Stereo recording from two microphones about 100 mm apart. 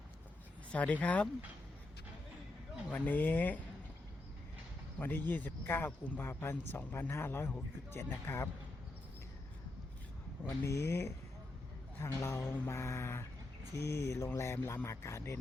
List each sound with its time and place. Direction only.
0.7 s speech: 15° left (ahead or behind)
2.9 s speech: 15° left (ahead or behind)
4.9 s speech: 20° left (ahead or behind)
10.6 s speech: 30° left (ahead or behind)